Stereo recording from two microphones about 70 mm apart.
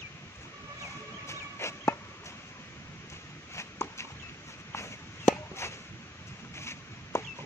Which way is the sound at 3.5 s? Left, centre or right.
Left.